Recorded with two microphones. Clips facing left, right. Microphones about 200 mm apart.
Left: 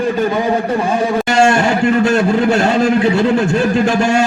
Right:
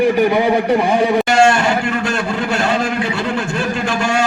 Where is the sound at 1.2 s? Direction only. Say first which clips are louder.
Left 1 dB; 45° left (ahead or behind).